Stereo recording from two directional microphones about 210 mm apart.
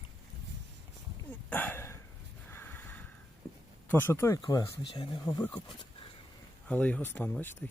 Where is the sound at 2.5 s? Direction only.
10° left (ahead or behind).